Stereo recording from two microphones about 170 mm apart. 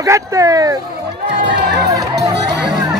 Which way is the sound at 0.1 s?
20° right (ahead or behind).